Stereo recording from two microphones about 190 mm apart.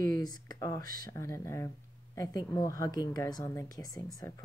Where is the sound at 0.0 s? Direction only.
20° left (ahead or behind).